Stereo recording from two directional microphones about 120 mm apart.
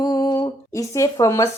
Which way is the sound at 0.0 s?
30° left (ahead or behind).